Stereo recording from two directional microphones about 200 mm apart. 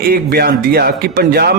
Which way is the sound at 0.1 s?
50° right (ahead or behind).